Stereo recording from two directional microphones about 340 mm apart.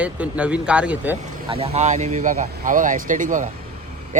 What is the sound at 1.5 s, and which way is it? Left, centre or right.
Speech, centre.